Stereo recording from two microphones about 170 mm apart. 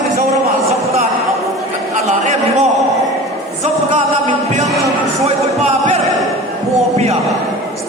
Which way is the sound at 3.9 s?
45° right (ahead or behind).